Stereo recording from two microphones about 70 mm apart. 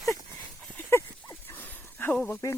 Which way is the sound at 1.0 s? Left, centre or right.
Left.